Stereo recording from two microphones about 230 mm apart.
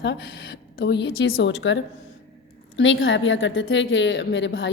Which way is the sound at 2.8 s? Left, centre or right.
Left.